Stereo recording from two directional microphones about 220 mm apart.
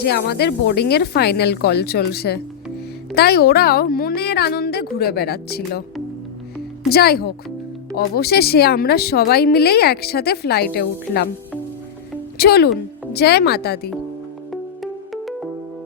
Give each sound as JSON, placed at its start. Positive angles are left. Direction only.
{"t": 0.0, "sound": "a woman's voice", "side_deg": 45}
{"t": 6.9, "sound": "a woman's voice", "side_deg": 45}
{"t": 12.4, "sound": "a woman's voice", "side_deg": 45}
{"t": 14.5, "sound": "music", "side_deg": 0}